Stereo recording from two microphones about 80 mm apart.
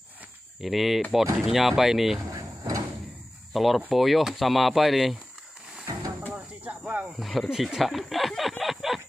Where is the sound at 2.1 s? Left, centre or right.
Right.